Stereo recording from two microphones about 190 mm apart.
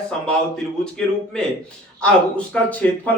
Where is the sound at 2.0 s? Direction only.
5° left (ahead or behind).